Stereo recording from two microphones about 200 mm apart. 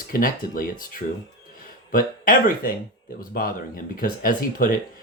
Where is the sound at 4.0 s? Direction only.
45° left (ahead or behind).